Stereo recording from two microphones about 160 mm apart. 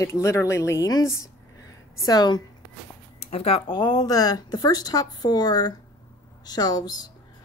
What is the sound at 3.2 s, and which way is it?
Speech, 40° left (ahead or behind).